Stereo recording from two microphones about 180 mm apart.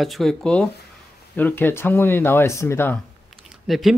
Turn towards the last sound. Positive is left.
turn(degrees=0)  # may be behind; listen again after turning